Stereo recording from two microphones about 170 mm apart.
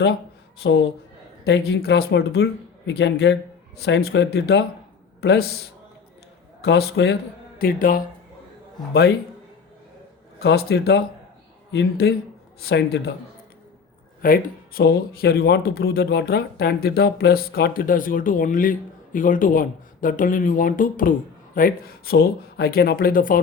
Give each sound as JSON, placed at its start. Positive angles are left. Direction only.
{"t": 0.6, "sound": "speech", "side_deg": 90}
{"t": 3.8, "sound": "speech", "side_deg": 80}
{"t": 5.2, "sound": "a man's voice", "side_deg": 90}
{"t": 6.6, "sound": "speech", "side_deg": 70}
{"t": 7.6, "sound": "speech", "side_deg": 55}
{"t": 8.9, "sound": "speech", "side_deg": 70}
{"t": 10.4, "sound": "speech", "side_deg": 70}
{"t": 14.2, "sound": "speech", "side_deg": 60}